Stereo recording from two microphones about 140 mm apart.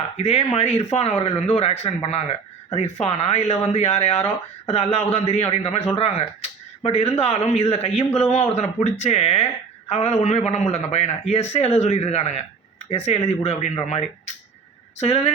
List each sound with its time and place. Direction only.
0.2 s speech: 45° left (ahead or behind)